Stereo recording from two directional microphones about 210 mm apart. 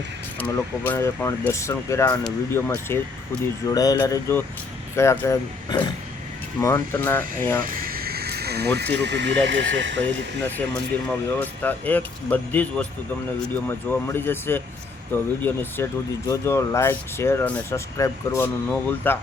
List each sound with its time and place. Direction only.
0.3 s speech: 10° left (ahead or behind)
7.6 s speech: 45° right (ahead or behind); by 10.0 s 60° right (ahead or behind)
10.9 s speech: 10° left (ahead or behind)